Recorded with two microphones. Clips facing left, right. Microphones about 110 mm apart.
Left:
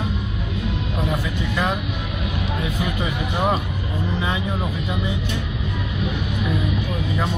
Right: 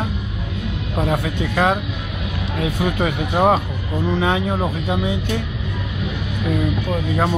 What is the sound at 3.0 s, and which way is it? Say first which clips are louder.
Speech: right 7 dB; 55° right (ahead or behind).